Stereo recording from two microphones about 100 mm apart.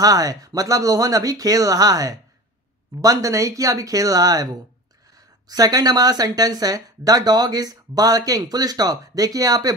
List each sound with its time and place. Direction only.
0.0 s speech: 40° right (ahead or behind)